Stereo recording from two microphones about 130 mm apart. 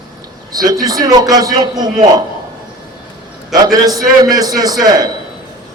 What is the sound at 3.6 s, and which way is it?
A man's voice, 30° right (ahead or behind).